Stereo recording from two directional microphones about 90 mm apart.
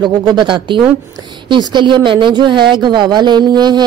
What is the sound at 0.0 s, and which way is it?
A woman's voice, 55° right (ahead or behind).